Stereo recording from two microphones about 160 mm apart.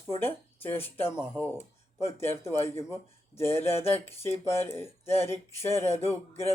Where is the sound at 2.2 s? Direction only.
15° left (ahead or behind).